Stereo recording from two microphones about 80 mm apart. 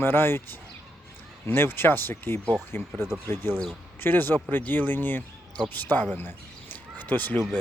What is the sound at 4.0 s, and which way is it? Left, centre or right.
Speech, left.